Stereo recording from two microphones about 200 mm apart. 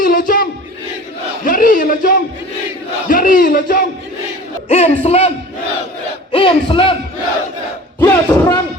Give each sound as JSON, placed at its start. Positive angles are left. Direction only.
{"t": 0.0, "sound": "battle cry", "side_deg": 45}
{"t": 1.5, "sound": "battle cry", "side_deg": 45}
{"t": 3.1, "sound": "speech", "side_deg": 45}
{"t": 4.7, "sound": "speech", "side_deg": 30}
{"t": 6.3, "sound": "a sound", "side_deg": 25}
{"t": 7.9, "sound": "a sound", "side_deg": 15}